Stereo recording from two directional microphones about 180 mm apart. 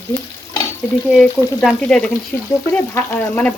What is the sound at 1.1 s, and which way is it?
Speech, centre (ahead or behind).